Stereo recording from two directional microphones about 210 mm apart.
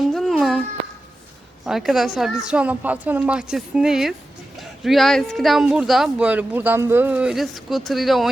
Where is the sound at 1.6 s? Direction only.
Centre (ahead or behind).